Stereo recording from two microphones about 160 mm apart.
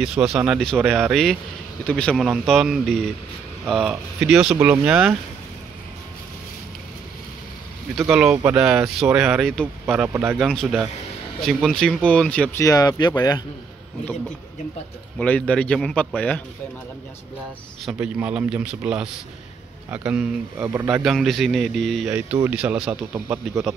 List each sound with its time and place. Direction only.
0.0 s speech: 5° right (ahead or behind)
8.1 s speech: 5° right (ahead or behind)
9.9 s a man's voice: 15° right (ahead or behind)
10.4 s speech: 5° left (ahead or behind)
12.6 s speech: 25° left (ahead or behind)
15.1 s speech: 10° left (ahead or behind)
17.9 s a man's voice: 10° right (ahead or behind)
21.0 s speech: centre (ahead or behind)
22.1 s a man's voice: 10° right (ahead or behind)
23.2 s speech: 20° right (ahead or behind)